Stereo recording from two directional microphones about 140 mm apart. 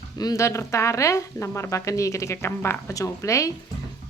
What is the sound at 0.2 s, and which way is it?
Speech, 25° left (ahead or behind).